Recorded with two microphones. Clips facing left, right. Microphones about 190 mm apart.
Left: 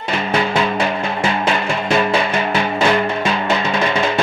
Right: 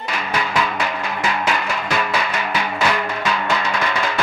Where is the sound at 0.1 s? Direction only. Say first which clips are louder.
Left 5 dB; 25° left (ahead or behind).